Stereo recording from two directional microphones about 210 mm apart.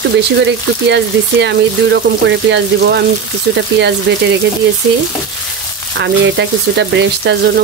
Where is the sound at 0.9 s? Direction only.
55° right (ahead or behind).